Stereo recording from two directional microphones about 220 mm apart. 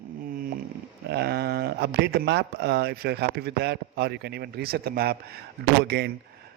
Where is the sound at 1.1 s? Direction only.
45° right (ahead or behind).